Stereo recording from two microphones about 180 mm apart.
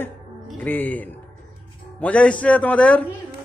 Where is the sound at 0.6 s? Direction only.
10° left (ahead or behind).